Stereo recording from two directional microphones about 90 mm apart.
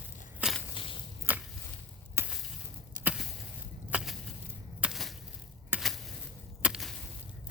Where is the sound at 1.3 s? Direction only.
20° right (ahead or behind).